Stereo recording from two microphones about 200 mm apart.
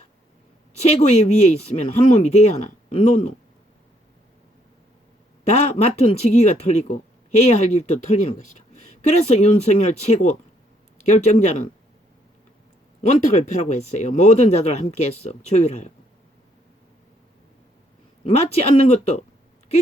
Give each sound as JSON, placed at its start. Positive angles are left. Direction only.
{"t": 0.8, "sound": "speech", "side_deg": 35}
{"t": 5.5, "sound": "speech", "side_deg": 35}
{"t": 13.0, "sound": "speech", "side_deg": 35}
{"t": 18.3, "sound": "speech", "side_deg": 30}